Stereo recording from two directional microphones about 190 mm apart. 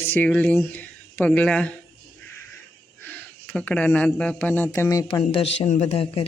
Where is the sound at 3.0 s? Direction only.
10° left (ahead or behind).